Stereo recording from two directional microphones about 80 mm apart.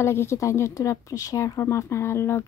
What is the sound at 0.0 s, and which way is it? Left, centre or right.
A woman's voice, left.